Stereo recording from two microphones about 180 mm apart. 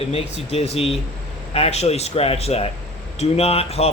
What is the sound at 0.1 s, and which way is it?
Speech, 35° left (ahead or behind).